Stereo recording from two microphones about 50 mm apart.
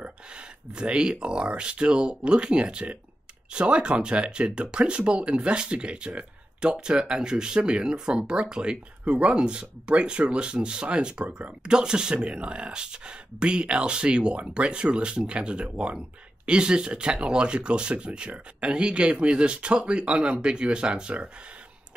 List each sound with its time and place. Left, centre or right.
0.0 s speech: centre